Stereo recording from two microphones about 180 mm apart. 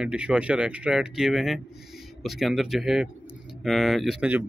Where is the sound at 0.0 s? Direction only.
5° right (ahead or behind).